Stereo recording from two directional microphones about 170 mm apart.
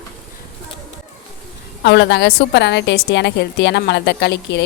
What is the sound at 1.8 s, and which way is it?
A woman's voice, 90° left.